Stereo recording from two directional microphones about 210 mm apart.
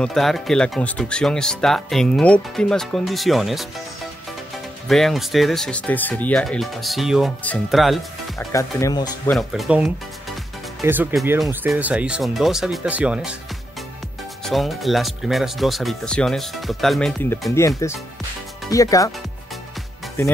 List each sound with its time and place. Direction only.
0.0 s speech: centre (ahead or behind)
4.8 s speech: centre (ahead or behind)
8.4 s speech: 15° left (ahead or behind)
9.3 s speech: centre (ahead or behind)
14.4 s speech: centre (ahead or behind); by 19.1 s 15° left (ahead or behind)